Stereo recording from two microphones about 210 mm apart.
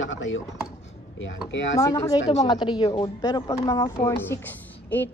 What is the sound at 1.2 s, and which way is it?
Speech, 60° left (ahead or behind).